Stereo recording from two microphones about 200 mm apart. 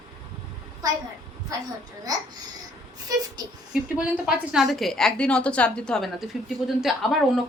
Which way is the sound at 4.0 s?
5° right (ahead or behind).